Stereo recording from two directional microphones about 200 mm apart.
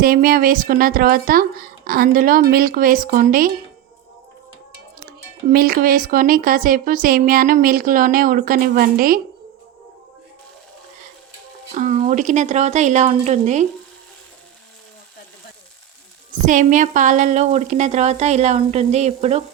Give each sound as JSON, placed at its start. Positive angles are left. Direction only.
{"t": 0.0, "sound": "speech", "side_deg": -45}
{"t": 5.5, "sound": "speech", "side_deg": -45}
{"t": 11.7, "sound": "speech", "side_deg": -35}
{"t": 16.5, "sound": "speech", "side_deg": -40}